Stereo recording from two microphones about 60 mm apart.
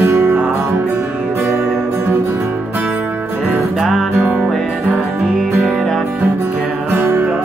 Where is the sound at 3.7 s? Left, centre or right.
Centre.